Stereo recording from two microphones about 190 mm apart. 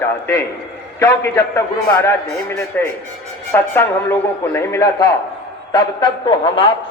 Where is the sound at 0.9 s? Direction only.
15° left (ahead or behind).